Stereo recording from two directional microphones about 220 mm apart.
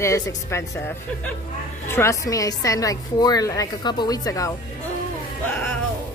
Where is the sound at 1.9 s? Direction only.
15° left (ahead or behind).